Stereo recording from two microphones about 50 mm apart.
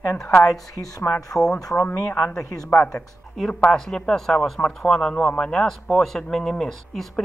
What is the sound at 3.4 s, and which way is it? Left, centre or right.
Speech, left.